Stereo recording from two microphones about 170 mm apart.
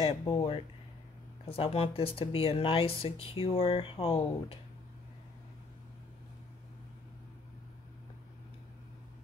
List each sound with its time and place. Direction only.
0.0 s speech: 35° left (ahead or behind)